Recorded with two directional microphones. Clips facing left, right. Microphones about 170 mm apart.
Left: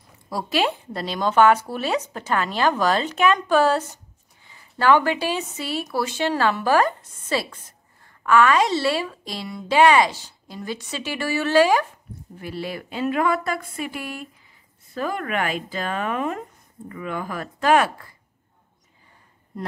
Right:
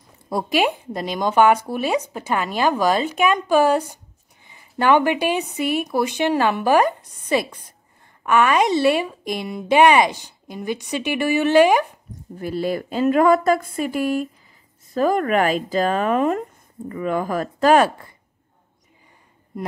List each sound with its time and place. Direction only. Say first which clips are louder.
0.3 s a woman's voice: right 3 dB; 15° right (ahead or behind)
12.4 s a woman's voice: right 7 dB; 40° right (ahead or behind); by 18.1 s 25° right (ahead or behind)